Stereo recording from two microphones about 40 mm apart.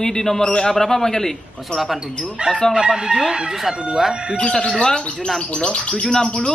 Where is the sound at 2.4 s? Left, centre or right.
Right; by 4.1 s centre.